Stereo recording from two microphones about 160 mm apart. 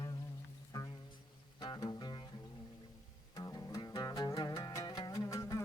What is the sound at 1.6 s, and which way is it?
Music, 25° left (ahead or behind).